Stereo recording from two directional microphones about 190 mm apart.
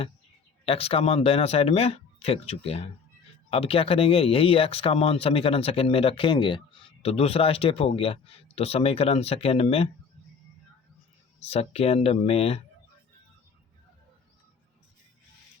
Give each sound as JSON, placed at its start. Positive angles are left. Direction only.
{"t": 0.6, "sound": "speech", "side_deg": 30}
{"t": 11.4, "sound": "speech", "side_deg": 30}